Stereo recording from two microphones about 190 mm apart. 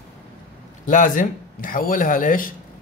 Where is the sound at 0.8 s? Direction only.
45° left (ahead or behind).